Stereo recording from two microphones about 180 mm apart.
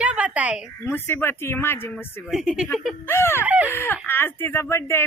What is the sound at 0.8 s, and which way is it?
Speech, 10° left (ahead or behind).